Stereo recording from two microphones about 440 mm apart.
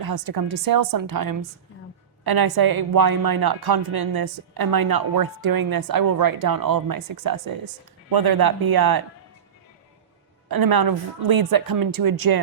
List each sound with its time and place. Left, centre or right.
0.0 s a woman's voice: right
10.5 s a woman's voice: right